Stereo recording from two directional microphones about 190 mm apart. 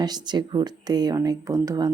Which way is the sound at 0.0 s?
20° right (ahead or behind).